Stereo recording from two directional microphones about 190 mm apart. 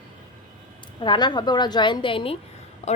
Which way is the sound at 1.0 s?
25° left (ahead or behind).